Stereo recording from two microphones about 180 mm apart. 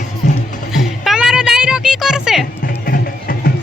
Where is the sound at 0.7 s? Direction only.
Centre (ahead or behind).